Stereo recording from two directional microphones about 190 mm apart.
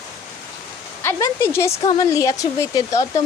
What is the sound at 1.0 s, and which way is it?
Speech, 15° left (ahead or behind).